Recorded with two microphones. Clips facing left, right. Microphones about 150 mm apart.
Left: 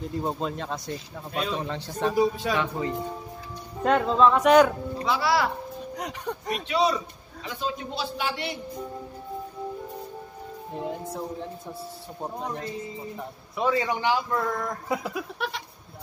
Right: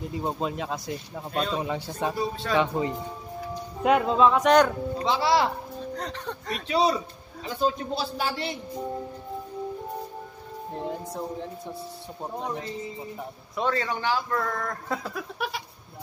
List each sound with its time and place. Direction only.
0.1 s speech: centre (ahead or behind)
1.6 s speech: 10° right (ahead or behind)
2.1 s speech: 10° left (ahead or behind)
2.5 s speech: 20° right (ahead or behind)
3.8 s speech: 5° right (ahead or behind)
4.9 s speech: 25° right (ahead or behind)
5.9 s speech: 10° left (ahead or behind)
6.7 s a man's voice: 35° right (ahead or behind)
10.7 s speech: centre (ahead or behind)
15.3 s goat: 5° right (ahead or behind)